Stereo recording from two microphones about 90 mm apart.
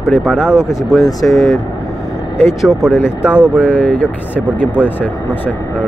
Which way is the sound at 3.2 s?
15° right (ahead or behind).